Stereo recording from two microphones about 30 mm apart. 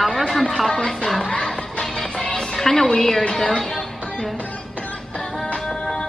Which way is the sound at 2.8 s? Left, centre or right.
Centre.